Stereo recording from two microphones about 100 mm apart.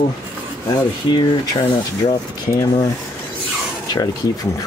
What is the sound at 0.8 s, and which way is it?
Speech, 50° left (ahead or behind).